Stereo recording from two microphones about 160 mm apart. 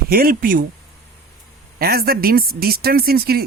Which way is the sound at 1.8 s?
70° right (ahead or behind).